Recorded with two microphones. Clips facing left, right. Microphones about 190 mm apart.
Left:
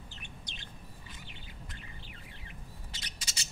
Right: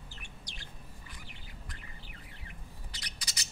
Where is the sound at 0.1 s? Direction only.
20° left (ahead or behind).